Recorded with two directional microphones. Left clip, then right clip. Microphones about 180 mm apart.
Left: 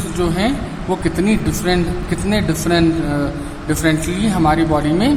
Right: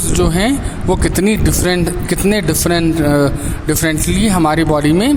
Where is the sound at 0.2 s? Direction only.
50° right (ahead or behind).